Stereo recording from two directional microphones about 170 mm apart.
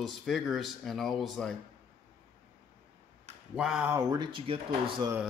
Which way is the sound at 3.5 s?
5° right (ahead or behind).